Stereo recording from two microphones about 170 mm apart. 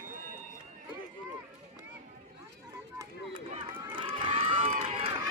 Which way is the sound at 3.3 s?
30° right (ahead or behind).